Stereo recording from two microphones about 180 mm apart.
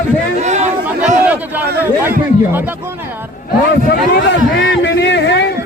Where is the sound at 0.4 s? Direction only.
40° right (ahead or behind).